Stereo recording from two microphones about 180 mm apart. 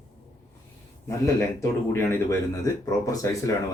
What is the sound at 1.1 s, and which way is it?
Speech, 15° left (ahead or behind).